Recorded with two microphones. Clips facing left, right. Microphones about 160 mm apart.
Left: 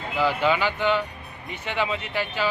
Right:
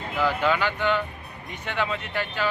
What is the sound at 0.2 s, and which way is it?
Speech, 10° left (ahead or behind).